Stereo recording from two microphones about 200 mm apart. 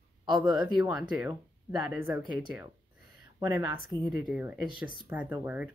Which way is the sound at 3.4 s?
15° right (ahead or behind).